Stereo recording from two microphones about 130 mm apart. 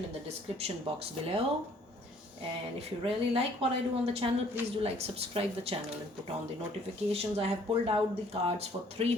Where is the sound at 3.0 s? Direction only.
45° right (ahead or behind).